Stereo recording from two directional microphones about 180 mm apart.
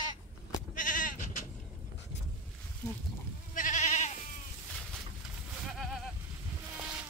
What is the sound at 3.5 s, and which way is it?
Goat, 45° left (ahead or behind).